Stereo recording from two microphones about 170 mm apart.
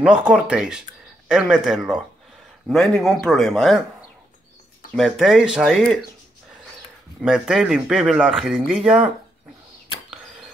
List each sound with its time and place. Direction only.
0.0 s speech: 5° right (ahead or behind)
4.9 s speech: centre (ahead or behind)
7.2 s speech: 5° right (ahead or behind)